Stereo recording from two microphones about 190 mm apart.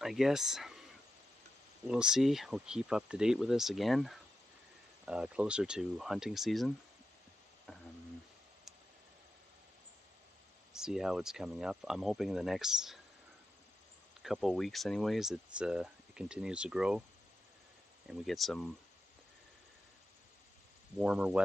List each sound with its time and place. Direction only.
0.0 s speech: centre (ahead or behind)
1.9 s speech: 5° right (ahead or behind)
10.7 s speech: 5° right (ahead or behind)
14.2 s speech: centre (ahead or behind)
18.0 s speech: centre (ahead or behind)
21.0 s speech: 5° right (ahead or behind)